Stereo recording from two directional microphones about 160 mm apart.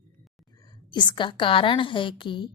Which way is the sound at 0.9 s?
30° left (ahead or behind).